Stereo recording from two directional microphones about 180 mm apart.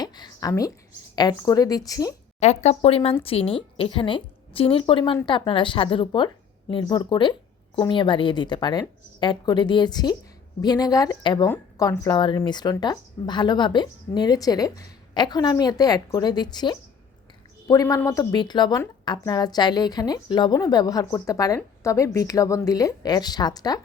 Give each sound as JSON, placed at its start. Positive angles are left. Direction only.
{"t": 0.0, "sound": "a sound", "side_deg": 25}
{"t": 1.1, "sound": "speech", "side_deg": 20}
{"t": 2.4, "sound": "speech", "side_deg": 35}
{"t": 11.4, "sound": "speech", "side_deg": 15}